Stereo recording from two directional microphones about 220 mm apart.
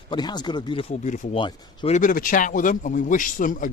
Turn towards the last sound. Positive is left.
turn(degrees=35)  # may be behind; listen again after turning